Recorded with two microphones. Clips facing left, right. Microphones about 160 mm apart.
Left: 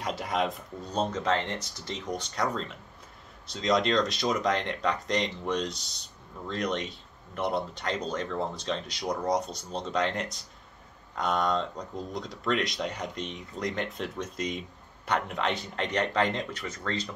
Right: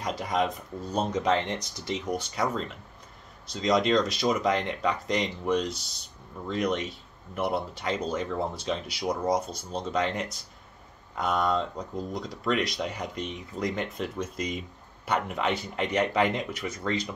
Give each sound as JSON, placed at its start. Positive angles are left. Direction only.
{"t": 0.0, "sound": "speech", "side_deg": 0}
{"t": 1.1, "sound": "speech", "side_deg": -15}